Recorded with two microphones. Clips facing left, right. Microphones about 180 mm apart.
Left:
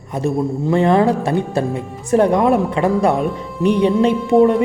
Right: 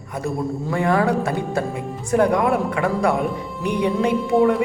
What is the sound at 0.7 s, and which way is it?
Speech, 25° left (ahead or behind).